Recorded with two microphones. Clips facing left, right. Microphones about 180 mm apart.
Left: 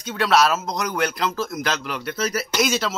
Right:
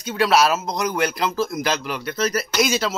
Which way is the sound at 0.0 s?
5° right (ahead or behind).